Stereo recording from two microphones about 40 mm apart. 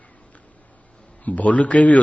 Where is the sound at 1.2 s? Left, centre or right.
Left.